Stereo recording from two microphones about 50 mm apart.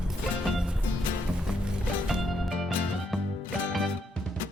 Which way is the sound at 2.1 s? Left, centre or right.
Centre.